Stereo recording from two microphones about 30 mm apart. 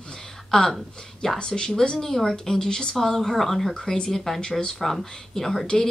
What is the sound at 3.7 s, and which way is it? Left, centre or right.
Speech, left.